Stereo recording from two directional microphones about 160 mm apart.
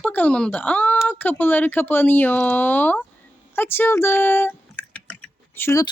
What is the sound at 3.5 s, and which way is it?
Typing, 15° left (ahead or behind).